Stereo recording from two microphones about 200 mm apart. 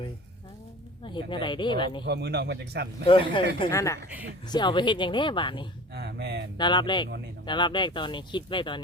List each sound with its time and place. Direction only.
1.0 s speech: 25° left (ahead or behind)
2.0 s a man's voice: 55° right (ahead or behind)
3.1 s speech: 25° left (ahead or behind)
3.7 s a woman's voice: 15° left (ahead or behind)
5.9 s speech: 55° right (ahead or behind)
6.6 s speech: 20° left (ahead or behind)